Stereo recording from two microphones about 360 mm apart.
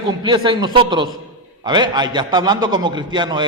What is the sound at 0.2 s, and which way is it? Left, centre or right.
A man's voice, centre.